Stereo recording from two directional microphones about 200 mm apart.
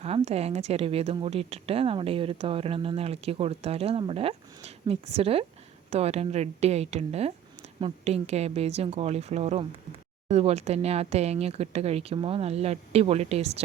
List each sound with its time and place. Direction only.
0.0 s a woman's voice: 30° right (ahead or behind)